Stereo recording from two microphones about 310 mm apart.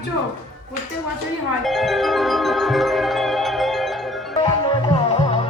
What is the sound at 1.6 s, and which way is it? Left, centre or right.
Music, centre.